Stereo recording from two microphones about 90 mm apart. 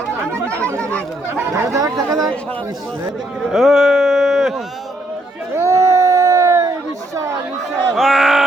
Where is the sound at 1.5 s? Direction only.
35° right (ahead or behind).